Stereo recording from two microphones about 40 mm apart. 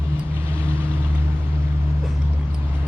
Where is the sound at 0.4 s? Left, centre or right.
Right.